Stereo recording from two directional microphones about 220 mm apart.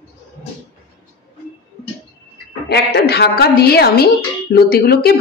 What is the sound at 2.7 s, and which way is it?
A woman's voice, 50° left (ahead or behind).